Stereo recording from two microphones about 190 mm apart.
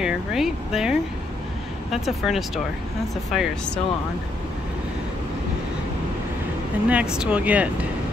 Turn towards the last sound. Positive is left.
turn(degrees=-5)  # may be behind; listen again after turning